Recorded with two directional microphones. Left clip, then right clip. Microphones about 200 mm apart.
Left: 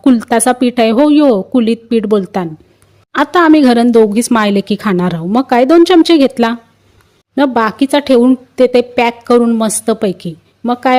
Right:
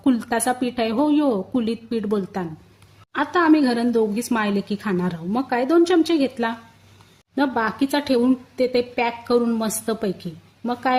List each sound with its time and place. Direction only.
0.0 s a woman's voice: 40° left (ahead or behind)